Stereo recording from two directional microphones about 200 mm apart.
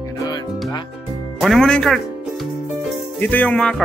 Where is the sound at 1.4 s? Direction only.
Centre (ahead or behind).